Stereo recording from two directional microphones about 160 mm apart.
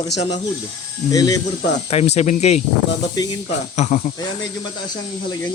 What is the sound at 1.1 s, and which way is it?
Speech, 25° left (ahead or behind).